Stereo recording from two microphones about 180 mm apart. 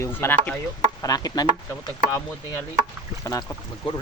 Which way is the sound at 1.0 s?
20° left (ahead or behind).